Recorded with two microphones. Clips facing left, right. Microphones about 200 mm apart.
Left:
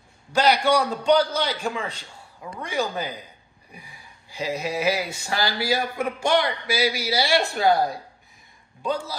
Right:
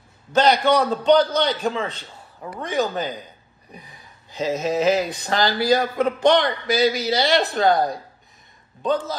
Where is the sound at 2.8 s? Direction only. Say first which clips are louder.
Right 4 dB; 15° left (ahead or behind).